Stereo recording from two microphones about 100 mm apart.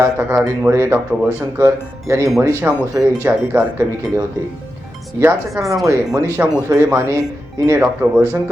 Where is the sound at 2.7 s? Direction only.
15° right (ahead or behind).